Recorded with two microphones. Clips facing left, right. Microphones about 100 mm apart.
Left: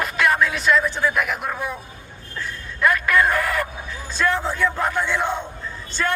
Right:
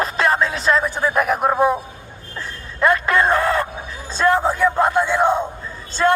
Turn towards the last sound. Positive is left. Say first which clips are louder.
# right 7 dB
turn(degrees=-30)  # may be behind; listen again after turning